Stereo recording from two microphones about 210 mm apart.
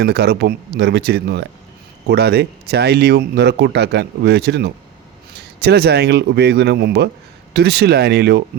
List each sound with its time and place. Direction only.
0.0 s speech: 50° right (ahead or behind)